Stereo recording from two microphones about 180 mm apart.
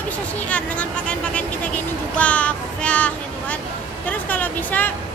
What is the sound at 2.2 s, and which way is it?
Child singing, 5° left (ahead or behind).